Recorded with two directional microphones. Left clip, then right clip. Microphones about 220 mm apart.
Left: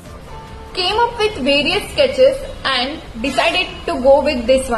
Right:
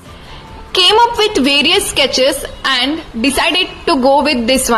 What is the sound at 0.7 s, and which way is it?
A woman's voice, 35° right (ahead or behind).